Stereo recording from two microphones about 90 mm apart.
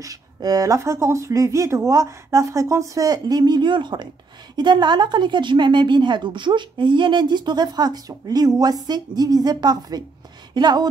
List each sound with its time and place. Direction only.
0.0 s speech: 45° right (ahead or behind)
0.7 s a woman's voice: 30° right (ahead or behind); by 10.9 s 55° right (ahead or behind)